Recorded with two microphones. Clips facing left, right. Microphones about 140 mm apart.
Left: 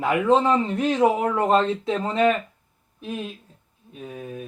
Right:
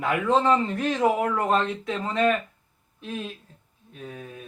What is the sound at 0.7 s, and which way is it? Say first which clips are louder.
Speech: left 3 dB; 25° left (ahead or behind).